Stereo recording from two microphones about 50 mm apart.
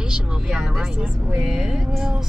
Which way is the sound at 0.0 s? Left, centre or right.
Centre.